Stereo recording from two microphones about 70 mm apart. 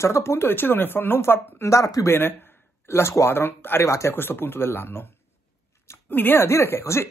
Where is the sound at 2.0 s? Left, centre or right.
Left.